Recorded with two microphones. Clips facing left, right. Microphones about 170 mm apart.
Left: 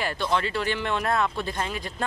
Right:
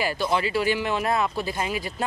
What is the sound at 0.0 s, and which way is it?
Speech, 5° right (ahead or behind).